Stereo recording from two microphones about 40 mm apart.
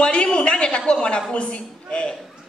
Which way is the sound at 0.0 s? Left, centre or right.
Left.